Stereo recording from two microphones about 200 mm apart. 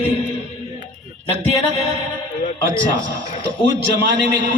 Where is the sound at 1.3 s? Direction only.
35° right (ahead or behind).